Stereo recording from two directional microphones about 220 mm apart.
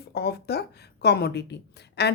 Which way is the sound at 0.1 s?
45° left (ahead or behind).